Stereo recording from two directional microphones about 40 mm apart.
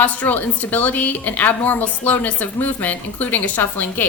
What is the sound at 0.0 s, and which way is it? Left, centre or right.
A woman's voice, left.